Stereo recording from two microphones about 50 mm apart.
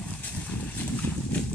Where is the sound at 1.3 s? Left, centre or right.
Left.